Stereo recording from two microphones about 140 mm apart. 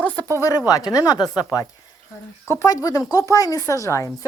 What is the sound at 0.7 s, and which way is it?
Speech, 25° left (ahead or behind).